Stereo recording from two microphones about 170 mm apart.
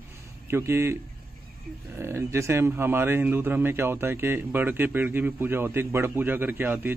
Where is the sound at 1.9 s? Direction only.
15° right (ahead or behind).